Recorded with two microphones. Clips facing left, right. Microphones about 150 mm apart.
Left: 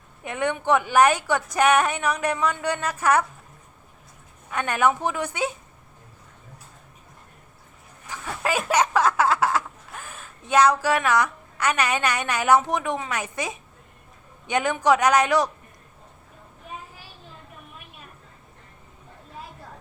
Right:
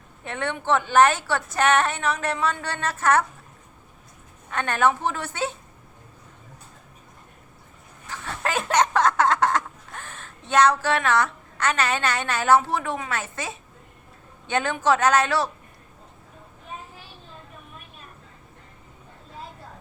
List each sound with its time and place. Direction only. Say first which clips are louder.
0.3 s a woman's voice: left 2 dB; 15° left (ahead or behind)
4.5 s a woman's voice: even; 10° left (ahead or behind)
8.1 s a sound: left 1 dB; 10° left (ahead or behind)
14.4 s a woman's voice: left 1 dB; 15° left (ahead or behind)